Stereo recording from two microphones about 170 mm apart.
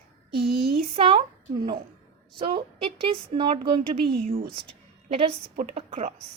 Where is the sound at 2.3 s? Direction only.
30° right (ahead or behind).